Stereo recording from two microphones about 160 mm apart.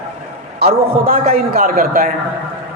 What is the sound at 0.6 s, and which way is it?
Speech, 65° right (ahead or behind).